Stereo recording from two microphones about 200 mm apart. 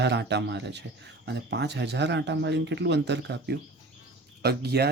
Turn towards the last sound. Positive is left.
turn(degrees=-55)  # may be behind; listen again after turning